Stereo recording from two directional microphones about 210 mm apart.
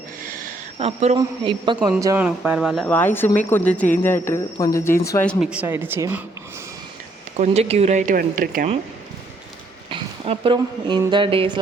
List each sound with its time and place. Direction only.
0.2 s a sound: 40° right (ahead or behind)
0.8 s speech: 30° right (ahead or behind)
2.0 s speech: 10° right (ahead or behind)
7.3 s speech: 30° right (ahead or behind)
9.9 s speech: 25° right (ahead or behind)